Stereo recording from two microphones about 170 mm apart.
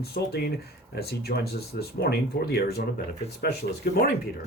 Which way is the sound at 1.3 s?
55° left (ahead or behind).